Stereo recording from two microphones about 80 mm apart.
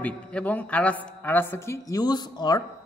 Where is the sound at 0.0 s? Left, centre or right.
Centre.